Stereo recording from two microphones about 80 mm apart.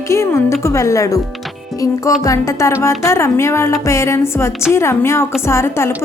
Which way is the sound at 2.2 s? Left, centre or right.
Left.